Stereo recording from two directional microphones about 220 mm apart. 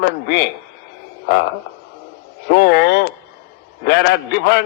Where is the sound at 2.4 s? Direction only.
50° left (ahead or behind).